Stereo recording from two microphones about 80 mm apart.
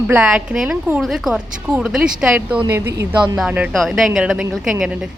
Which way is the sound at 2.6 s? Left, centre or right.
Right.